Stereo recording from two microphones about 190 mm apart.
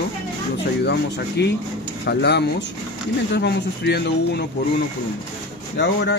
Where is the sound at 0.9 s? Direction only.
60° left (ahead or behind).